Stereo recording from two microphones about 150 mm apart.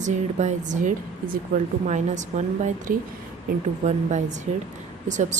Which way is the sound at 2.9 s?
65° right (ahead or behind).